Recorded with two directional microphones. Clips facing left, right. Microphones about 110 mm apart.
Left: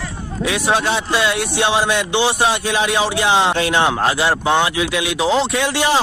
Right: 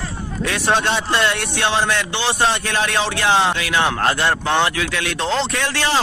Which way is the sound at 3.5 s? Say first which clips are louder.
Left 3 dB; 25° left (ahead or behind).